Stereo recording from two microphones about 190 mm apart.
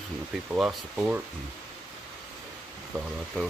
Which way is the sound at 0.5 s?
5° right (ahead or behind).